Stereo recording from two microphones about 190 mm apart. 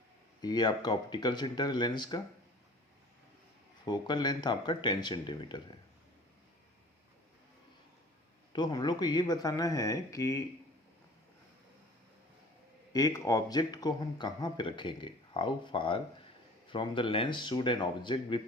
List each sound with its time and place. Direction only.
0.4 s speech: 20° left (ahead or behind)
3.8 s speech: 20° left (ahead or behind)
8.5 s speech: 20° left (ahead or behind)
12.9 s speech: 20° left (ahead or behind)